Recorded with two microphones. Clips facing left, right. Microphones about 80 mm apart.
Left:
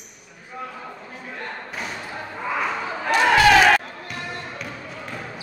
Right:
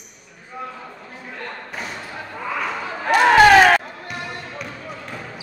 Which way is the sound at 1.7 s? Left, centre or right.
Centre.